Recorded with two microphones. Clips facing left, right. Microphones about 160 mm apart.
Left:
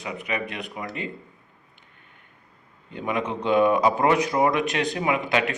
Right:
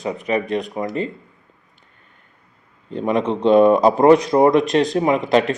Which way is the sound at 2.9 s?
30° right (ahead or behind).